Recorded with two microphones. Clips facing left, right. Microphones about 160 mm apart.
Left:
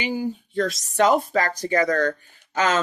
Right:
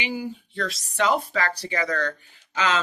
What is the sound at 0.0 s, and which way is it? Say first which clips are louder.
Speech: left 4 dB; 45° left (ahead or behind).